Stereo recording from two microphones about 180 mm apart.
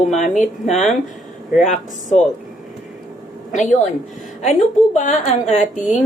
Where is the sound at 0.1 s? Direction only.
45° left (ahead or behind).